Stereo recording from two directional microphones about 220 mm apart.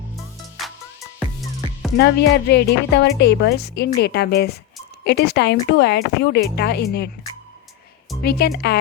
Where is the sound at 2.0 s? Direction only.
50° left (ahead or behind).